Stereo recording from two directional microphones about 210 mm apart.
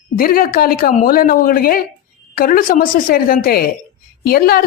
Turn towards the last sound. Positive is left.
turn(degrees=45)  # may be behind; listen again after turning